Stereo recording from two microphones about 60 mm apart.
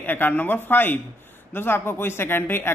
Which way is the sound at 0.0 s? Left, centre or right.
Left.